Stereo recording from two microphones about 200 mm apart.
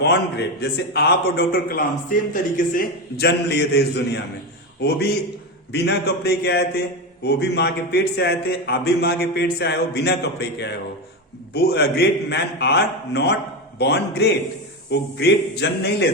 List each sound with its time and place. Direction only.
0.0 s a man's voice: 55° left (ahead or behind)
11.5 s a man's voice: 55° left (ahead or behind)